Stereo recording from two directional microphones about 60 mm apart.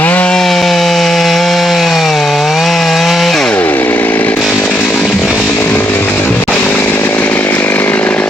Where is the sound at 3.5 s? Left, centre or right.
Left.